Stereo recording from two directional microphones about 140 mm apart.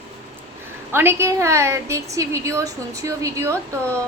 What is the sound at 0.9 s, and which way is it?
A woman's voice, 15° right (ahead or behind).